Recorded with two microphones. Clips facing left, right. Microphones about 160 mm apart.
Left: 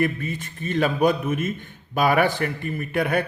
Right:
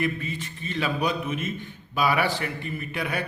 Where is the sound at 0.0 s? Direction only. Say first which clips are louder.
Left 4 dB; 50° left (ahead or behind).